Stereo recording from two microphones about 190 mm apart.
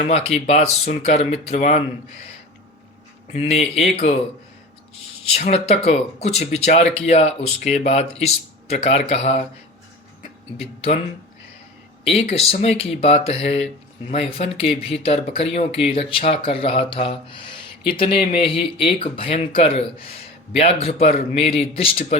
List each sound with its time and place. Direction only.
0.0 s speech: 30° left (ahead or behind)
3.3 s speech: 30° left (ahead or behind)
5.3 s speech: 35° left (ahead or behind)
12.3 s speech: 30° left (ahead or behind)